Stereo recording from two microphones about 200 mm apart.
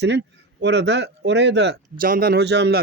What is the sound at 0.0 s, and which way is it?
Speech, 60° right (ahead or behind).